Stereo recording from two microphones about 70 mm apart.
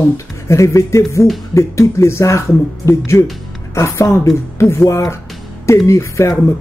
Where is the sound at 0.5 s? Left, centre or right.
Left.